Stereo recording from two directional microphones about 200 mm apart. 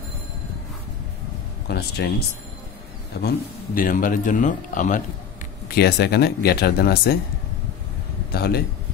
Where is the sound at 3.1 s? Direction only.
55° left (ahead or behind).